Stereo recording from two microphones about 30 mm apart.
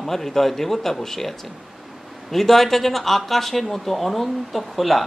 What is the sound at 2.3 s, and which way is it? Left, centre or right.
Speech, centre.